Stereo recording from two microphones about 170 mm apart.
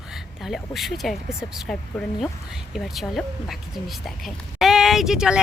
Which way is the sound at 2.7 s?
Centre (ahead or behind).